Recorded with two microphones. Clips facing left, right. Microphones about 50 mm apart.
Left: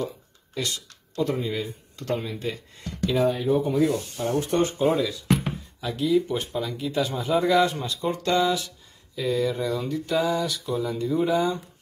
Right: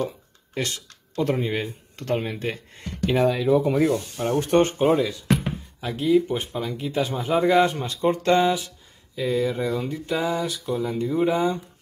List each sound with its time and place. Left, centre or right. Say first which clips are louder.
0.6 s speech: right 2 dB; right
3.3 s speech: right 3 dB; right
4.2 s speech: right 4 dB; right
5.8 s speech: right 3 dB; right